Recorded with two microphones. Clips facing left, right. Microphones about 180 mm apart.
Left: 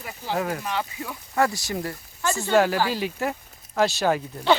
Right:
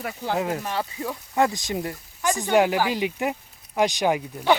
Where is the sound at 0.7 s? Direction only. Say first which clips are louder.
Right 1 dB; 35° right (ahead or behind).